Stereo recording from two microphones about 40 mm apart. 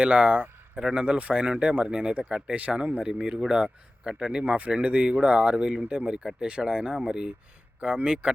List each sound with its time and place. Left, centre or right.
0.0 s speech: right
4.7 s speech: right